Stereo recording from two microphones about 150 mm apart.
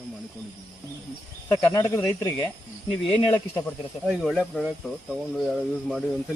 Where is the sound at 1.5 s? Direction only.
15° left (ahead or behind).